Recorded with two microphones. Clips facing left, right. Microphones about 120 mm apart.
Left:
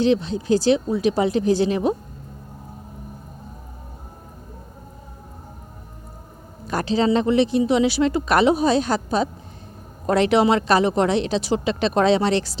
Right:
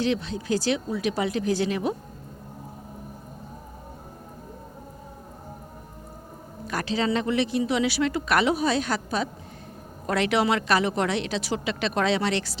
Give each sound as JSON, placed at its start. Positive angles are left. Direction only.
{"t": 0.0, "sound": "speech", "side_deg": 30}
{"t": 6.7, "sound": "speech", "side_deg": 30}